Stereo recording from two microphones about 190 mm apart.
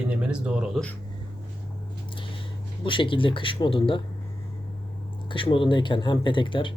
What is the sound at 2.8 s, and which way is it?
Speech, 25° left (ahead or behind).